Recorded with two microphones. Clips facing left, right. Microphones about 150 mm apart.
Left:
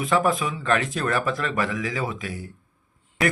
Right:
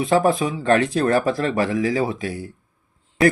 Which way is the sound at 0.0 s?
35° right (ahead or behind).